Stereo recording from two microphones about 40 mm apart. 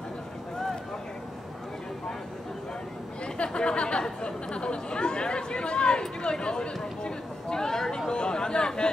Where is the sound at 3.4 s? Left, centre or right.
Left.